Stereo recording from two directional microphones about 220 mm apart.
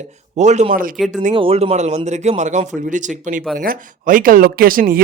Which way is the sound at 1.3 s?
25° right (ahead or behind).